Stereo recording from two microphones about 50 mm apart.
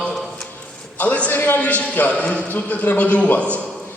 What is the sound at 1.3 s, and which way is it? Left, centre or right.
Speech, left.